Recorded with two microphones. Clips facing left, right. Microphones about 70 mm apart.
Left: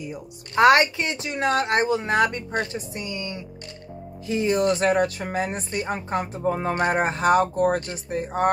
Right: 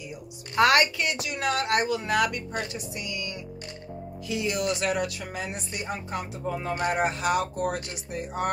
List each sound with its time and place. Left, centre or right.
0.6 s speech: left